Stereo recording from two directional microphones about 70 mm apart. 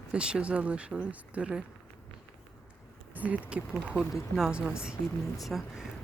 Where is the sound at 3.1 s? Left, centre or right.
Right.